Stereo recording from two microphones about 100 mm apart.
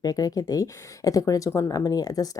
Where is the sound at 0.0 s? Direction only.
40° left (ahead or behind).